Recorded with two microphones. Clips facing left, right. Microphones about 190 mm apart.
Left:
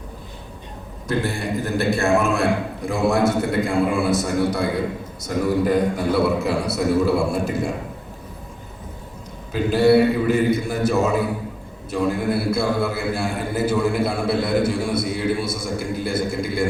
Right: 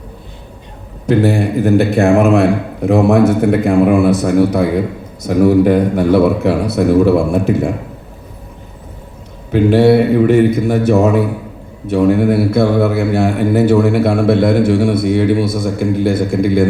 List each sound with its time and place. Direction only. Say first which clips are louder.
1.0 s a man's voice: right 11 dB; 70° right (ahead or behind)
9.5 s a man's voice: right 7 dB; 65° right (ahead or behind)